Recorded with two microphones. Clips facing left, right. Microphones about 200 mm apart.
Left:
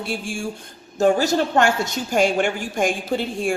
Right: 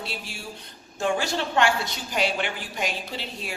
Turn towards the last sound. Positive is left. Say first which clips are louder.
# left 12 dB
turn(degrees=50)  # may be behind; listen again after turning